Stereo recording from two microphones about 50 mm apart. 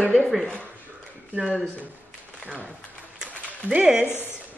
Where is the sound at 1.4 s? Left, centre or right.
Centre.